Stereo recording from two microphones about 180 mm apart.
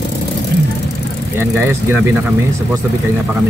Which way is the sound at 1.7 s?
15° right (ahead or behind).